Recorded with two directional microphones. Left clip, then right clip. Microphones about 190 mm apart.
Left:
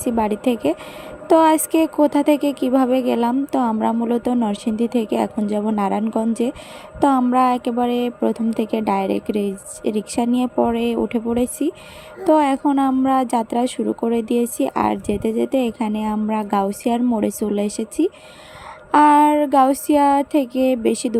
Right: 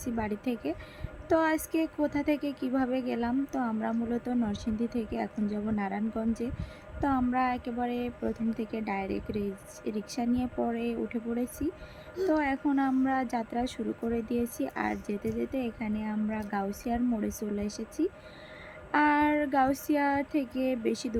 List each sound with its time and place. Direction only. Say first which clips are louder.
0.0 s speech: left 14 dB; 35° left (ahead or behind)